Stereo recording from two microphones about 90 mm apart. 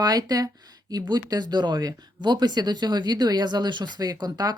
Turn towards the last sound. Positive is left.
turn(degrees=-45)  # may be behind; listen again after turning